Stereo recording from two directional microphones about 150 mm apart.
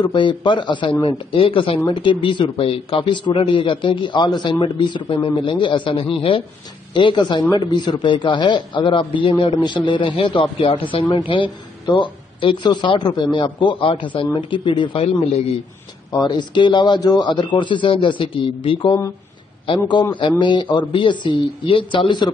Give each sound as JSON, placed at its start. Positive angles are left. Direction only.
{"t": 0.0, "sound": "a man's voice", "side_deg": 30}